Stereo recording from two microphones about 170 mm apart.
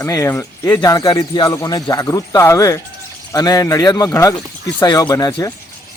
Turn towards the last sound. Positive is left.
turn(degrees=20)  # may be behind; listen again after turning